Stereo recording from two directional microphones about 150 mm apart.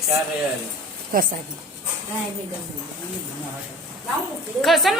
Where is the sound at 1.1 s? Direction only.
70° right (ahead or behind).